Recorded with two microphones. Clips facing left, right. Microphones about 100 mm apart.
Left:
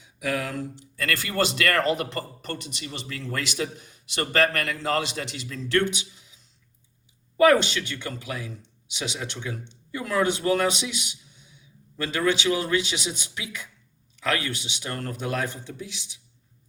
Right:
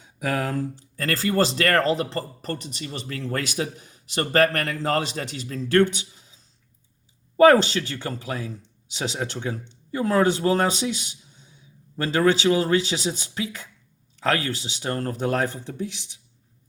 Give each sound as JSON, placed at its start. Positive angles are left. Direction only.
{"t": 0.0, "sound": "speech", "side_deg": -40}